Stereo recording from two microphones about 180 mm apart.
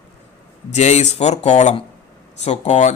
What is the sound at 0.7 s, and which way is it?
Speech, 40° left (ahead or behind).